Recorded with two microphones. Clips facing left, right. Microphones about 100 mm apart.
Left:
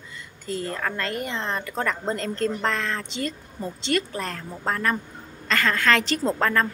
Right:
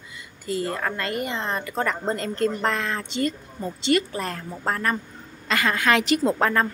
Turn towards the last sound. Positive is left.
turn(degrees=-15)  # may be behind; listen again after turning